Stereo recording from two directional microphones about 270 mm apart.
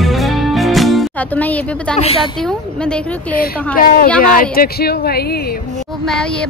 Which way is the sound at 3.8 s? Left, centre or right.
Left.